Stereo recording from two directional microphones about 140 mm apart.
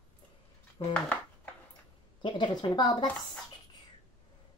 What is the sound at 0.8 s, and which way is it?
Speech, 40° left (ahead or behind).